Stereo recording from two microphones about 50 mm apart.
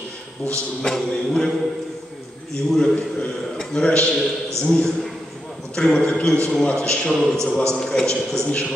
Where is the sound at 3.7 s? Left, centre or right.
Left.